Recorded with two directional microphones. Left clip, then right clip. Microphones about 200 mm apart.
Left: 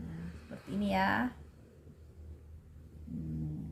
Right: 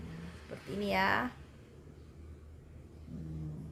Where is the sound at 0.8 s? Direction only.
35° right (ahead or behind).